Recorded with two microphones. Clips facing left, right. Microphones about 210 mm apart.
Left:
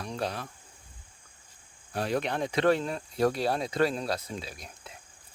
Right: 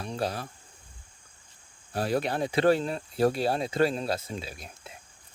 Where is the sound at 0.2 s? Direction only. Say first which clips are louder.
Right 2 dB; 35° right (ahead or behind).